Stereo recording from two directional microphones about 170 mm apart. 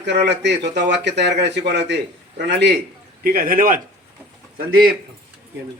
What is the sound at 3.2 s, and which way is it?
Speech, 60° right (ahead or behind).